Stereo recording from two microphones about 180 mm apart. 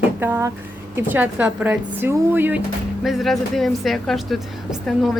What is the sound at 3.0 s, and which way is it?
A woman's voice, centre (ahead or behind).